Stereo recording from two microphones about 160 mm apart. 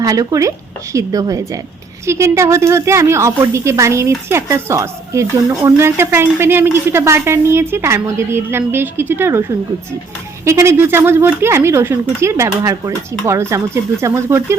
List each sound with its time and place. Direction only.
0.0 s a woman's voice: 20° right (ahead or behind)